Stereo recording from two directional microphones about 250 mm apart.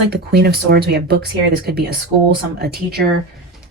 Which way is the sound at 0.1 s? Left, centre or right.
Right.